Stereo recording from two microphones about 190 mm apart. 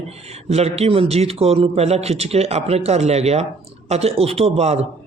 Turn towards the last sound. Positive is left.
turn(degrees=-35)  # may be behind; listen again after turning